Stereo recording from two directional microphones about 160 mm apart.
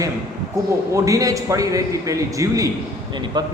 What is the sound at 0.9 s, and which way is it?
A man's voice, 20° right (ahead or behind).